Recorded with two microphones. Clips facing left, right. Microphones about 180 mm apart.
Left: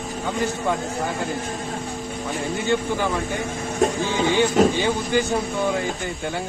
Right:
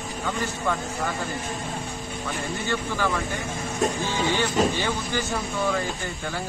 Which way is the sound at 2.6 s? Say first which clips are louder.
Left 4 dB; 20° left (ahead or behind).